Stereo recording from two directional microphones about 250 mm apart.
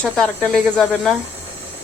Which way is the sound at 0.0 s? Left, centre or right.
Centre.